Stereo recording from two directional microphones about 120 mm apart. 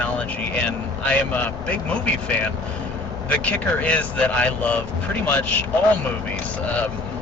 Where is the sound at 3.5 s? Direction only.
10° left (ahead or behind).